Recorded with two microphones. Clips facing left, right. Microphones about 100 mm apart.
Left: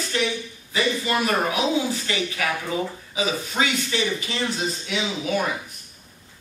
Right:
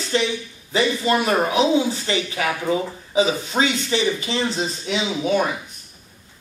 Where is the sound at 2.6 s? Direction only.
30° right (ahead or behind).